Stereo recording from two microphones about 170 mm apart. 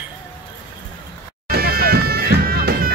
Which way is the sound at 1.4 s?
60° right (ahead or behind).